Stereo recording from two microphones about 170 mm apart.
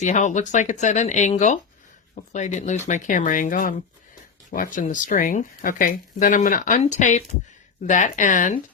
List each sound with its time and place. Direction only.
0.0 s speech: 45° left (ahead or behind)